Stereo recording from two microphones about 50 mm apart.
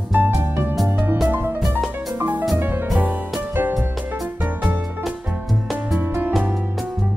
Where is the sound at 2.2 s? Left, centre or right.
Right.